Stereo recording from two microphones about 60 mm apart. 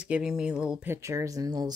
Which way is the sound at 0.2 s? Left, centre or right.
Centre.